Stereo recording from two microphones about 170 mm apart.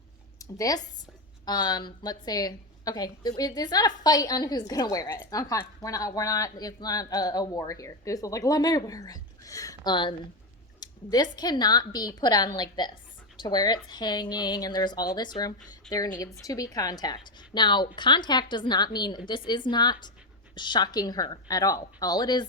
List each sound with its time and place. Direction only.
0.3 s a woman's voice: 20° left (ahead or behind)